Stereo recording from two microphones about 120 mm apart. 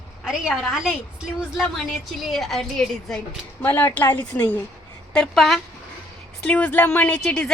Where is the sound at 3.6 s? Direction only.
15° left (ahead or behind).